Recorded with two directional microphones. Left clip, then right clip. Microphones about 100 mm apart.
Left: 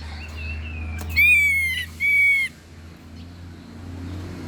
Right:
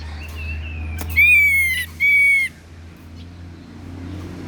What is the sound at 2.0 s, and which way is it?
Bird, 25° right (ahead or behind).